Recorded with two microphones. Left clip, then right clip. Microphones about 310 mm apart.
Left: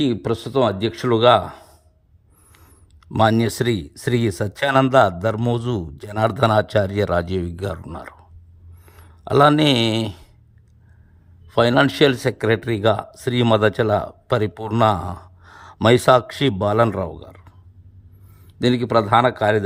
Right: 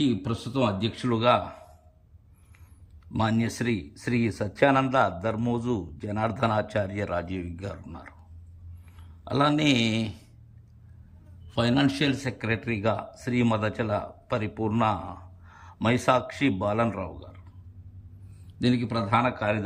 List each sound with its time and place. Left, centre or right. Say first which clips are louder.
0.0 s speech: left 7 dB; centre
3.2 s a man's voice: left 11 dB; centre
9.2 s speech: left 9 dB; centre
11.5 s speech: left 9 dB; centre
14.5 s a man's voice: left 6 dB; left
18.6 s speech: left 10 dB; centre